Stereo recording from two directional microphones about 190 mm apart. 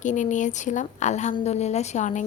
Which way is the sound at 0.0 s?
40° left (ahead or behind).